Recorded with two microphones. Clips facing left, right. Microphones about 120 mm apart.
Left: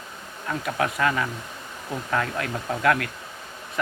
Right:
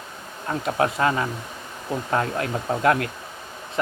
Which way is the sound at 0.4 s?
30° right (ahead or behind).